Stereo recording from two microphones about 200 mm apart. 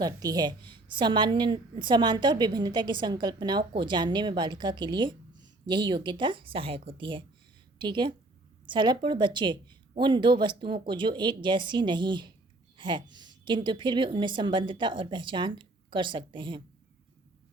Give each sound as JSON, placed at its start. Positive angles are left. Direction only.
{"t": 0.0, "sound": "a woman's voice", "side_deg": -20}